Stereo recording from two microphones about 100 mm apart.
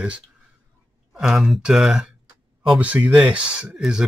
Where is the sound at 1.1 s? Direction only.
5° right (ahead or behind).